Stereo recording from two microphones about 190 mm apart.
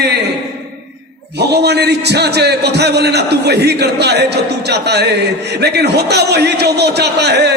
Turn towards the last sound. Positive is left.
turn(degrees=-60)  # may be behind; listen again after turning